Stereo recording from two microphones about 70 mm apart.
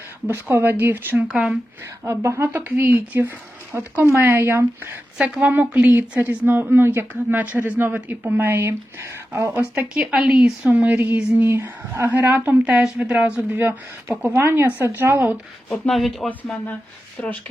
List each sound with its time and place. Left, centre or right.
0.3 s speech: right
1.3 s speech: centre
2.0 s speech: right
5.2 s a woman's voice: right
9.9 s speech: centre
10.7 s a woman's voice: right
11.4 s a woman's voice: right
15.9 s speech: centre